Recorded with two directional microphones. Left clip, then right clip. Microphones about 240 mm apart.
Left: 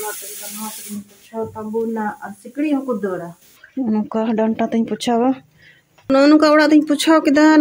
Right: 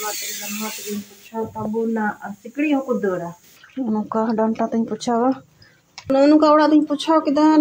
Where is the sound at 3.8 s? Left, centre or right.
Centre.